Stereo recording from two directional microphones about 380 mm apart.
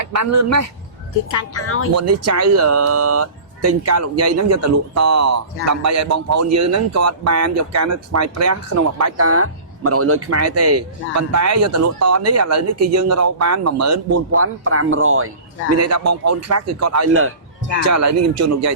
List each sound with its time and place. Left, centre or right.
0.0 s speech: right
1.3 s speech: left
2.0 s speech: right
15.8 s speech: right
17.8 s speech: right